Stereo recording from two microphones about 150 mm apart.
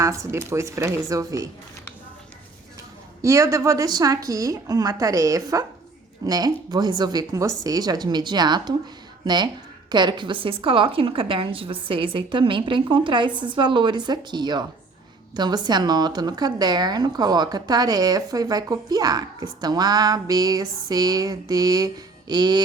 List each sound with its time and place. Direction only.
0.0 s a woman's voice: 20° right (ahead or behind)
3.2 s a woman's voice: 20° right (ahead or behind)